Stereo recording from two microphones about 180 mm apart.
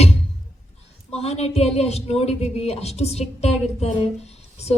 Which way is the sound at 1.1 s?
35° left (ahead or behind).